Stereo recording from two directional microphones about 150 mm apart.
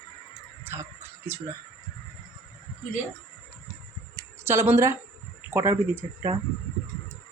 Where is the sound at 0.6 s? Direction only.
15° right (ahead or behind).